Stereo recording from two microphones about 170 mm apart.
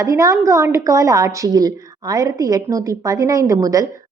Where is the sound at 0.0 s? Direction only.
20° right (ahead or behind).